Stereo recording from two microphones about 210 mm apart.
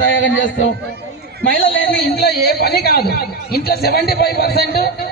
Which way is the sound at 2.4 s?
50° left (ahead or behind).